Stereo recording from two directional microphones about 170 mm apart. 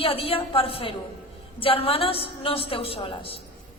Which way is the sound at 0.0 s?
35° left (ahead or behind).